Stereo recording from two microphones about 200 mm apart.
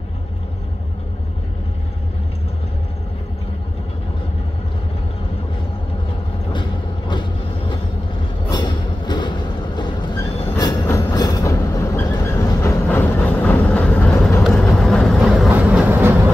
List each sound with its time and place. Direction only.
8.5 s train: 20° left (ahead or behind)
14.4 s vehicle: centre (ahead or behind)